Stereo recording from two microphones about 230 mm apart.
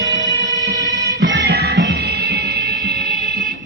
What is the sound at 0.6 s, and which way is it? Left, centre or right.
Music, right.